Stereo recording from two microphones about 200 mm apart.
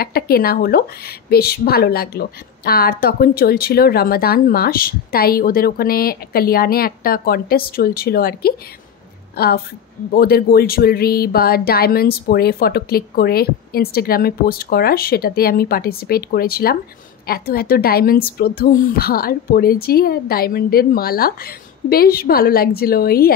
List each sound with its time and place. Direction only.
0.0 s a woman's voice: 50° left (ahead or behind)